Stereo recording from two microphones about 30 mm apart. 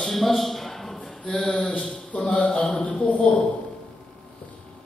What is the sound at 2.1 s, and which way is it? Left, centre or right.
Speech, left.